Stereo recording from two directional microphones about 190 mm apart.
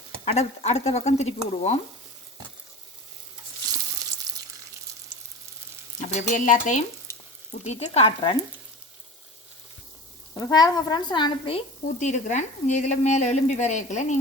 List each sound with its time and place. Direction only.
0.3 s a woman's voice: 35° left (ahead or behind)
4.3 s water: 20° right (ahead or behind)
6.0 s stir: 40° left (ahead or behind)
7.6 s a woman's voice: 35° left (ahead or behind)
10.3 s a woman's voice: 20° left (ahead or behind); by 14.2 s 40° left (ahead or behind)